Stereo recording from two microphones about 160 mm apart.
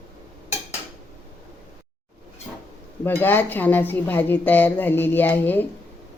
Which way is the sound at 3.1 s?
10° left (ahead or behind).